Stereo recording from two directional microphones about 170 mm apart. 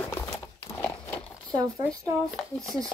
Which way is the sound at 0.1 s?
20° left (ahead or behind).